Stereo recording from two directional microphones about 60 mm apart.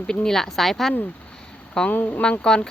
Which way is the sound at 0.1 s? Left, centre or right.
Centre.